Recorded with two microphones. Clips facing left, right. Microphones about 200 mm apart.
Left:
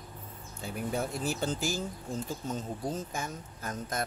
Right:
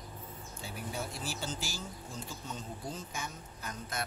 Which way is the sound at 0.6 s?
55° left (ahead or behind).